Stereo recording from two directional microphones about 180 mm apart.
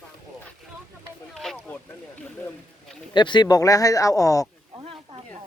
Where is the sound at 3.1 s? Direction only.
25° left (ahead or behind).